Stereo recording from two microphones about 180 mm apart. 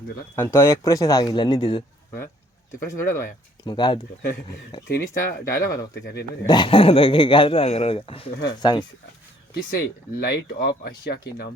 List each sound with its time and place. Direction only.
0.3 s speech: 15° left (ahead or behind)
2.9 s speech: 20° left (ahead or behind)
4.9 s speech: 60° left (ahead or behind)
6.4 s speech: 25° left (ahead or behind)
9.7 s speech: 65° left (ahead or behind)